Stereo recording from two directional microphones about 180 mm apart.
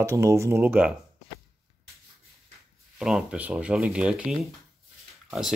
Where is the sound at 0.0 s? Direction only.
15° right (ahead or behind).